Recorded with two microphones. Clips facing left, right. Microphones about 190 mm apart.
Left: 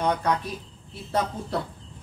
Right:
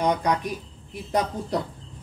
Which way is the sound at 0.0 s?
15° right (ahead or behind).